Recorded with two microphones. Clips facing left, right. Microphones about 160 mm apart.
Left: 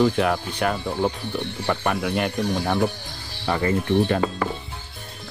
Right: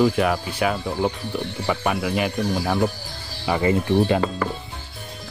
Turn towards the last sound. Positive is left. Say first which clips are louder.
# even
turn(degrees=5)  # may be behind; listen again after turning